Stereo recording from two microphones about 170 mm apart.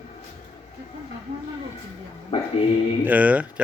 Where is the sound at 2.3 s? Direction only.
35° left (ahead or behind).